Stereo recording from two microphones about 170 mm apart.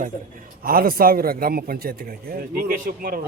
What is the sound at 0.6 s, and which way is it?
A man's voice, 60° right (ahead or behind).